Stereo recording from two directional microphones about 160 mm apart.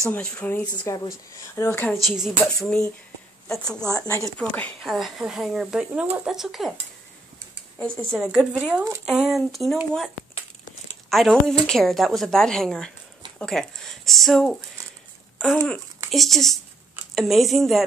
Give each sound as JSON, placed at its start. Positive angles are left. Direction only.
{"t": 0.1, "sound": "speech", "side_deg": 10}
{"t": 2.0, "sound": "speech", "side_deg": 0}
{"t": 3.9, "sound": "speech", "side_deg": 20}
{"t": 4.4, "sound": "speech", "side_deg": 10}
{"t": 4.9, "sound": "speech", "side_deg": 0}
{"t": 7.8, "sound": "speech", "side_deg": 5}
{"t": 16.1, "sound": "speech", "side_deg": 0}